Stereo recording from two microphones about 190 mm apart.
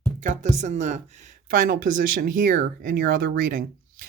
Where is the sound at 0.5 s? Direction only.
40° right (ahead or behind).